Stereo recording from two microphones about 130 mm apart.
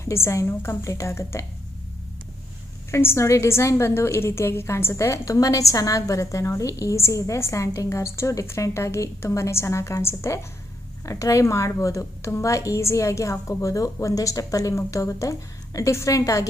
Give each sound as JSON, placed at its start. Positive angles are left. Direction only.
{"t": 0.0, "sound": "a woman's voice", "side_deg": 20}
{"t": 2.9, "sound": "a woman's voice", "side_deg": 20}